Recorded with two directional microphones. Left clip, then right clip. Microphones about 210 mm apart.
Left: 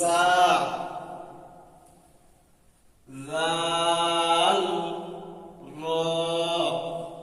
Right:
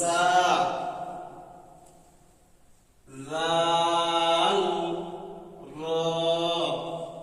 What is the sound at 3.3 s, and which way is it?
Mantra, 25° left (ahead or behind).